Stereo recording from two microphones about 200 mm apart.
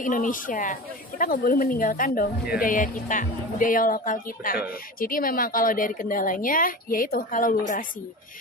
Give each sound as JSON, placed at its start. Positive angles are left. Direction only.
{"t": 0.0, "sound": "a woman's voice", "side_deg": 40}